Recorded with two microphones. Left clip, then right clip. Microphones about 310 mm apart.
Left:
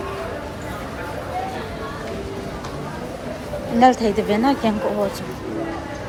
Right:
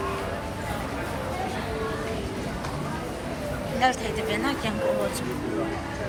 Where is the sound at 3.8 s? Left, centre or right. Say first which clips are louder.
Left 9 dB; left.